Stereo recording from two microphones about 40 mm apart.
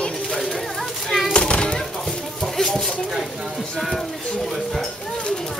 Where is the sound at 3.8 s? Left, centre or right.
Centre.